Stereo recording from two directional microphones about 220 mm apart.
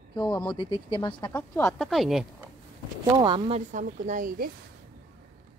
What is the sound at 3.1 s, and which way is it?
A woman's voice, 20° right (ahead or behind).